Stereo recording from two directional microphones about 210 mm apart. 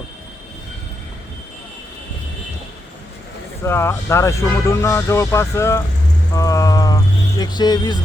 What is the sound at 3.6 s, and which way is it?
Speech, 10° left (ahead or behind).